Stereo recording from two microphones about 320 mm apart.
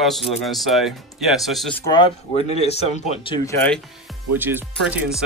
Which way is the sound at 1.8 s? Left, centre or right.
Centre.